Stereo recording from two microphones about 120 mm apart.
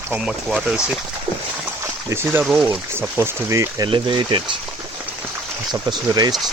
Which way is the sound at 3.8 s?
40° right (ahead or behind).